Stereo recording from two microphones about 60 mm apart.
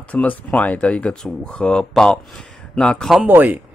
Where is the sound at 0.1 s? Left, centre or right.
Left.